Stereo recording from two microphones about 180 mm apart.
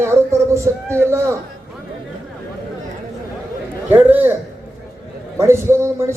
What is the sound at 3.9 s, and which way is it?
Speech, 10° right (ahead or behind).